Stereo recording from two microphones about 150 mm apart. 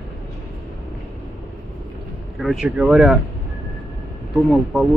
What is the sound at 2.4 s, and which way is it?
Speech, centre (ahead or behind).